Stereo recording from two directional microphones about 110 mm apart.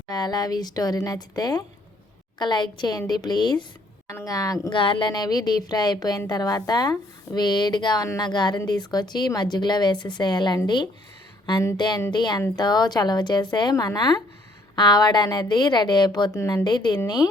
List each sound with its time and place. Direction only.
0.1 s a woman's voice: 40° left (ahead or behind)
4.1 s a woman's voice: 30° left (ahead or behind)
4.7 s a woman's voice: 50° left (ahead or behind)
11.8 s a woman's voice: 40° left (ahead or behind)